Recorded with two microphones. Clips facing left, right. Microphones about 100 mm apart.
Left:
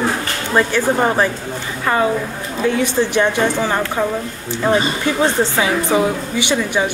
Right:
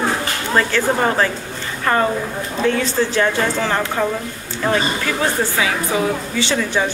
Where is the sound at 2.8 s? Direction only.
20° left (ahead or behind).